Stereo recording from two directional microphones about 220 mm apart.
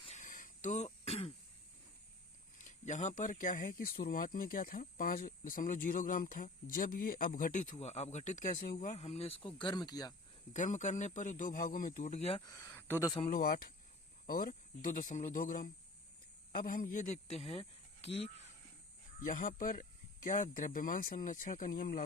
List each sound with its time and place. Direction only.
0.0 s throat clearing: 30° left (ahead or behind)
2.6 s speech: 35° left (ahead or behind); by 10.2 s 15° left (ahead or behind)
10.5 s speech: 35° left (ahead or behind)
12.5 s speech: 10° left (ahead or behind)
13.1 s speech: 25° left (ahead or behind)
13.4 s speech: 40° left (ahead or behind)